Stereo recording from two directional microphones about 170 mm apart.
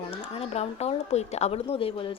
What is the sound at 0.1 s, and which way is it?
A woman's voice, 35° left (ahead or behind).